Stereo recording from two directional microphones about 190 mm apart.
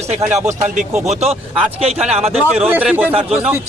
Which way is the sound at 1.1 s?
35° right (ahead or behind).